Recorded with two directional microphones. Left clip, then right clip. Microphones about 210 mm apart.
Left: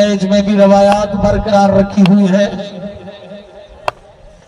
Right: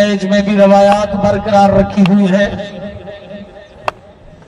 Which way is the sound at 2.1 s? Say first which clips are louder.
Even; 20° right (ahead or behind).